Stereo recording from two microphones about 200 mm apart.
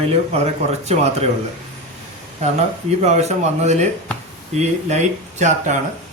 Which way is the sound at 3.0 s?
35° right (ahead or behind).